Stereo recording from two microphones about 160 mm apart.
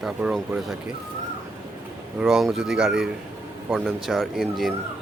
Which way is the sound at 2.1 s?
5° right (ahead or behind).